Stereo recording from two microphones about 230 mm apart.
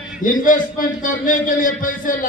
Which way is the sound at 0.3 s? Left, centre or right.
Left.